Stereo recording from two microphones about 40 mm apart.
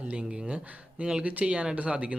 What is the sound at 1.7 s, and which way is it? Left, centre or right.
Speech, right.